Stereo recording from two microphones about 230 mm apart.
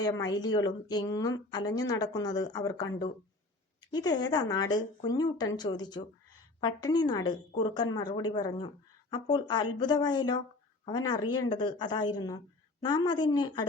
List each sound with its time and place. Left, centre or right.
0.0 s a woman's voice: centre